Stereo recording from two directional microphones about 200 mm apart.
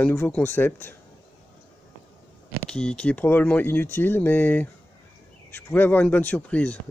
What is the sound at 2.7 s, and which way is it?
Speech, 5° left (ahead or behind).